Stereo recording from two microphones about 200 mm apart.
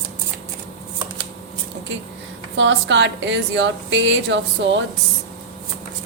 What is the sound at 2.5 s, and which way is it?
A woman's voice, 65° right (ahead or behind).